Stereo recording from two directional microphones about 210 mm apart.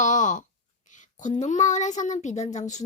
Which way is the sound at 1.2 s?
35° left (ahead or behind).